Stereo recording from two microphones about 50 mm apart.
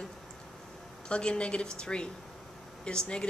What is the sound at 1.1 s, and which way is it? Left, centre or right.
A woman's voice, left.